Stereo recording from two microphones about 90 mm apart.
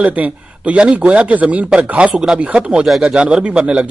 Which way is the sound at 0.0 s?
15° right (ahead or behind).